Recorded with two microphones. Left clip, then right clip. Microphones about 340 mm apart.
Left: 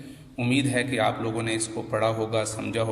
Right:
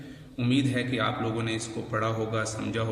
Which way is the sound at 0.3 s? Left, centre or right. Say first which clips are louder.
Left 3 dB; centre.